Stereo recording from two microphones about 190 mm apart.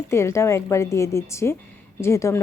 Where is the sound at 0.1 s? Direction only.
15° left (ahead or behind).